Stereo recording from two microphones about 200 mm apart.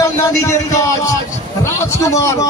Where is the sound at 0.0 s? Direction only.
15° left (ahead or behind).